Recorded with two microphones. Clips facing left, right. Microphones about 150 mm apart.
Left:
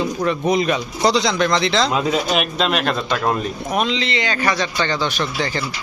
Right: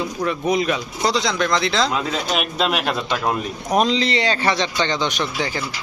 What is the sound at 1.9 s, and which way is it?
Speech, 15° left (ahead or behind).